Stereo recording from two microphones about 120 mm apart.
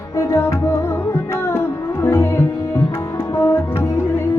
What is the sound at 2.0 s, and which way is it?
Music, 20° left (ahead or behind).